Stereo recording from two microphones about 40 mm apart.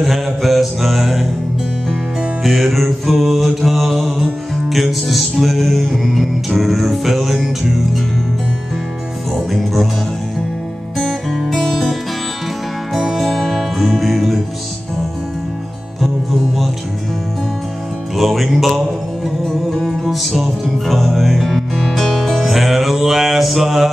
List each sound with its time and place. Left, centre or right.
0.0 s mantra: centre
2.4 s mantra: centre
9.3 s mantra: centre
11.0 s music: centre
11.5 s music: centre
13.2 s music: centre
18.1 s music: centre